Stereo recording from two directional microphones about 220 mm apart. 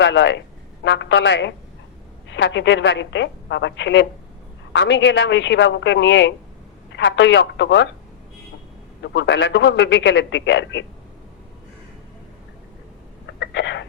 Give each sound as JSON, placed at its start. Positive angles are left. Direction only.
{"t": 0.0, "sound": "a woman's voice", "side_deg": 55}
{"t": 9.0, "sound": "a man's voice", "side_deg": 55}
{"t": 13.4, "sound": "a sound", "side_deg": 55}